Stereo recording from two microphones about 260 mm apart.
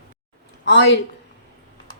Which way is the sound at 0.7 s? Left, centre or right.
Left.